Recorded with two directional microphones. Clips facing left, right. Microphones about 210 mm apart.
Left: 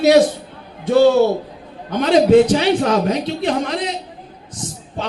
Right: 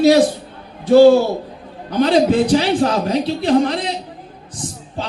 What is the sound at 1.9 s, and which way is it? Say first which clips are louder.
A man's voice: left 2 dB; 35° right (ahead or behind).